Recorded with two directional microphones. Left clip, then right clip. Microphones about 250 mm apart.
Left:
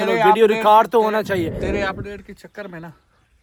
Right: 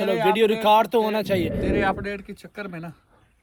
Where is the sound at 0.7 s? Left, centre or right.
Centre.